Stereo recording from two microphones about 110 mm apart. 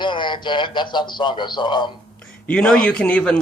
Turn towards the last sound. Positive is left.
turn(degrees=10)  # may be behind; listen again after turning